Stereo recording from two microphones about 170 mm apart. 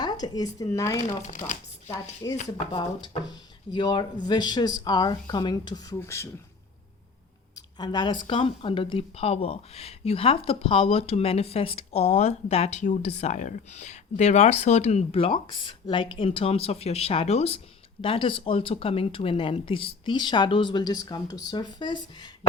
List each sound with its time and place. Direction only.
0.0 s speech: 25° left (ahead or behind)
7.8 s speech: 25° left (ahead or behind)